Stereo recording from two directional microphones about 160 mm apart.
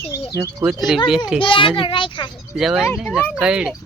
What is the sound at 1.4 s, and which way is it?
Speech, 30° left (ahead or behind).